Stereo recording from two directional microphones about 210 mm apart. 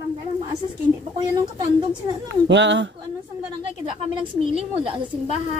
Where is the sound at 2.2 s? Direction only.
60° right (ahead or behind).